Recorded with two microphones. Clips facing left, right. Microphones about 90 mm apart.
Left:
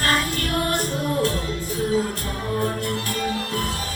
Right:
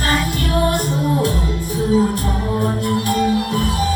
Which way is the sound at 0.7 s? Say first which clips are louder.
Right 5 dB; 15° right (ahead or behind).